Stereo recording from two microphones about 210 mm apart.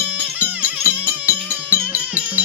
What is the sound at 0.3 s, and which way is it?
Music, 10° right (ahead or behind).